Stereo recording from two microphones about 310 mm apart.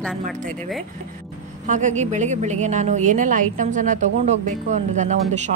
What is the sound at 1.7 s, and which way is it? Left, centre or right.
A woman's voice, right.